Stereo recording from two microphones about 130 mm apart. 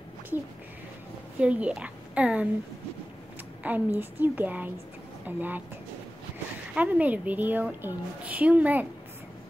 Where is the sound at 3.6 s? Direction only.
10° right (ahead or behind).